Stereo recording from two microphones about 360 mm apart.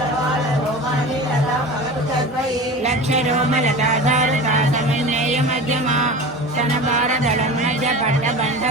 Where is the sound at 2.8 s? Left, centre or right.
Centre.